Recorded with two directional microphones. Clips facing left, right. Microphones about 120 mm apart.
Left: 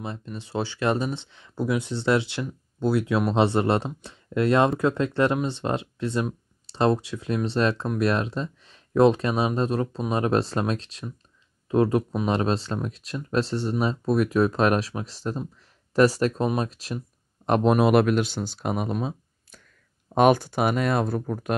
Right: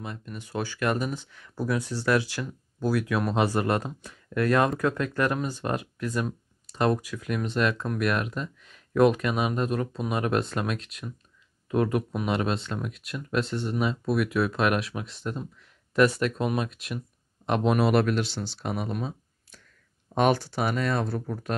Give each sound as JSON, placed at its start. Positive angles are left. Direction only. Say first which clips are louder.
{"t": 0.0, "sound": "speech", "louder": "left 3 dB", "side_deg": 30}
{"t": 17.5, "sound": "speech", "louder": "left 4 dB", "side_deg": 45}
{"t": 18.9, "sound": "speech", "louder": "left 4 dB", "side_deg": 25}
{"t": 20.2, "sound": "speech", "louder": "left 4 dB", "side_deg": 50}